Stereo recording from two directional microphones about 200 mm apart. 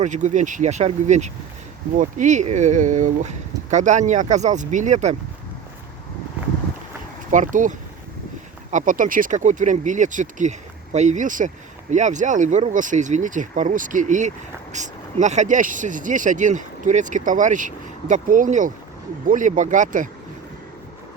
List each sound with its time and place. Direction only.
0.0 s speech: 35° right (ahead or behind)
7.3 s speech: 40° right (ahead or behind)